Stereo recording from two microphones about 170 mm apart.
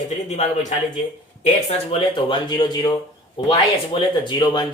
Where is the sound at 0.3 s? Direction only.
40° left (ahead or behind).